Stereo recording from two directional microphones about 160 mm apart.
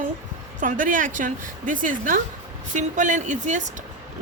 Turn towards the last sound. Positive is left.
turn(degrees=-50)  # may be behind; listen again after turning